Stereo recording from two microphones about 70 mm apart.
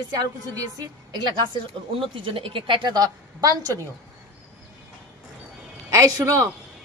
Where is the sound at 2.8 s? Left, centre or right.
Right.